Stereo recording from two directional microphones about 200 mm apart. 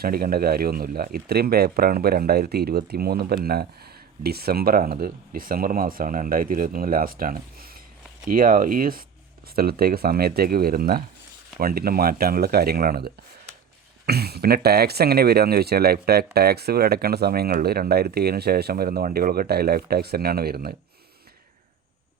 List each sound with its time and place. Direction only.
0.0 s speech: 50° right (ahead or behind)